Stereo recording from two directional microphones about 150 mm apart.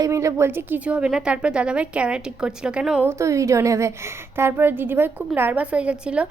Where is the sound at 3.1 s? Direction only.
20° right (ahead or behind).